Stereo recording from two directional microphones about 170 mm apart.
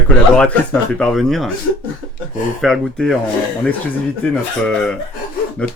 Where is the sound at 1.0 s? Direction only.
Centre (ahead or behind).